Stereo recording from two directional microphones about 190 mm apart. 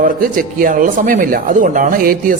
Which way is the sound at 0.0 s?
45° right (ahead or behind).